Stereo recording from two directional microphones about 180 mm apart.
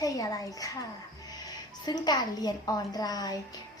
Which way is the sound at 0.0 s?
20° left (ahead or behind).